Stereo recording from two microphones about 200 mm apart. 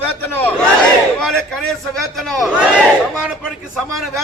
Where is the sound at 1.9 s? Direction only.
Centre (ahead or behind).